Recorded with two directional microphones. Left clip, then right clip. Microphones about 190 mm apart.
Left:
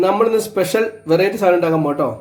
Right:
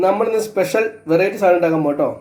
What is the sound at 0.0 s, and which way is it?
Speech, 30° left (ahead or behind).